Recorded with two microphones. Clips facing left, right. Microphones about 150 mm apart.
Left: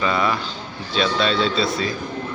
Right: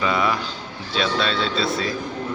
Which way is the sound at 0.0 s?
5° right (ahead or behind).